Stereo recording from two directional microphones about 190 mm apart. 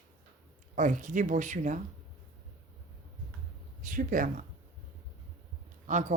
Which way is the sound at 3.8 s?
45° right (ahead or behind).